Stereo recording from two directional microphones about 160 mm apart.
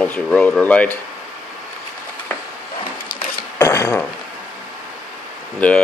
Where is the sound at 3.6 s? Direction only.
20° left (ahead or behind).